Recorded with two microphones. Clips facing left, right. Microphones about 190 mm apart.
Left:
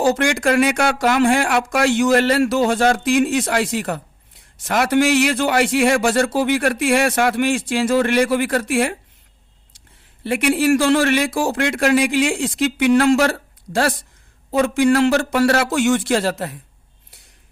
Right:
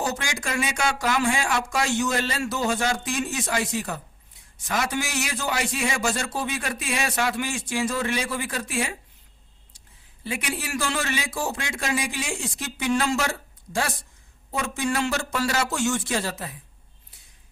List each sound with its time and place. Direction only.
0.0 s a man's voice: 75° left (ahead or behind)
10.2 s a man's voice: 65° left (ahead or behind)